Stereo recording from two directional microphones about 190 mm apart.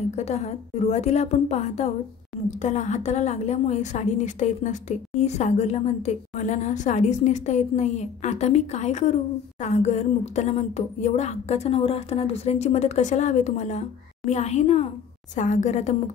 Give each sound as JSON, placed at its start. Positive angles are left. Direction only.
{"t": 0.1, "sound": "a woman's voice", "side_deg": 35}